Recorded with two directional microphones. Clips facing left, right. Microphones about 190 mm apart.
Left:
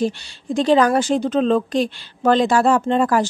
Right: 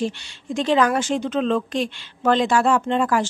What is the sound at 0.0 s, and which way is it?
A woman's voice, 35° left (ahead or behind).